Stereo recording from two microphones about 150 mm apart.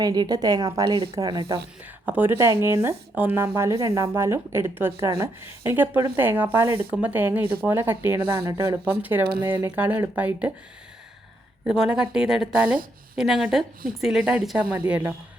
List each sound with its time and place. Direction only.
0.0 s a woman's voice: 25° right (ahead or behind)
2.0 s a woman's voice: 15° right (ahead or behind)
11.6 s a woman's voice: 5° right (ahead or behind)